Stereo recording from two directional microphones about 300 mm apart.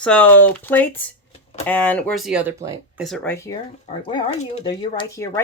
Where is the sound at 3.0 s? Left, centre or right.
Centre.